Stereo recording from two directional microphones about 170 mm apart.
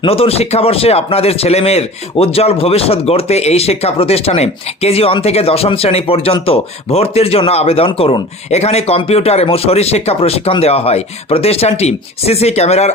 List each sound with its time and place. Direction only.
0.0 s speech: 35° left (ahead or behind)